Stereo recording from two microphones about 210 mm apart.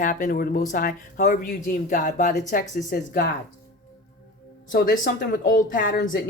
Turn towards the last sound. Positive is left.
turn(degrees=40)  # may be behind; listen again after turning